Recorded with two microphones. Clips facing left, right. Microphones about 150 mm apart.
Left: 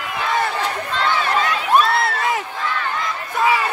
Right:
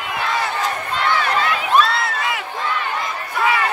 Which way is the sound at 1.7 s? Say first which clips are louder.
Left 2 dB; 50° left (ahead or behind).